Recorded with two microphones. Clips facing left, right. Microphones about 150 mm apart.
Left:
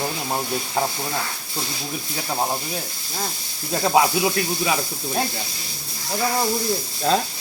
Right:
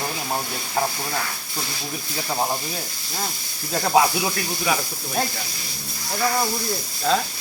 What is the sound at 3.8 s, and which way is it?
Speech, 15° left (ahead or behind).